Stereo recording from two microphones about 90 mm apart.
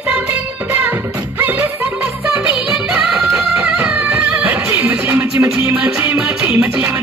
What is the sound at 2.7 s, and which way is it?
Music of bollywood, 5° right (ahead or behind).